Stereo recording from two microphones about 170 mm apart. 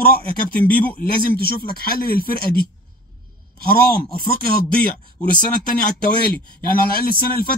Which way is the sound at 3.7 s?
60° left (ahead or behind).